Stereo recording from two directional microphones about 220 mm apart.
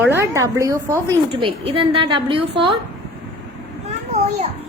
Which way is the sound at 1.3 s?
25° right (ahead or behind).